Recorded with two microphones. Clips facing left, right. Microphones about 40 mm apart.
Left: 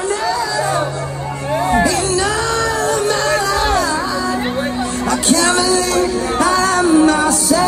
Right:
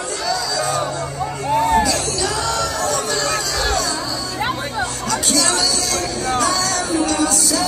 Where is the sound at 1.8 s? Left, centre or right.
Left.